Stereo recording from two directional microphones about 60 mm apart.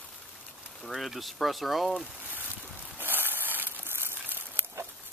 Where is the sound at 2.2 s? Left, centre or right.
Right.